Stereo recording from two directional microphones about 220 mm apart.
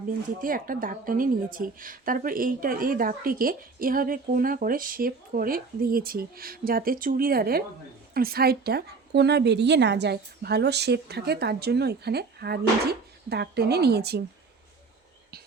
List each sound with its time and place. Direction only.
0.4 s a woman's voice: 40° right (ahead or behind)